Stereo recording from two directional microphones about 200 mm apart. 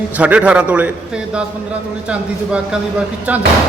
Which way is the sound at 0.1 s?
5° right (ahead or behind).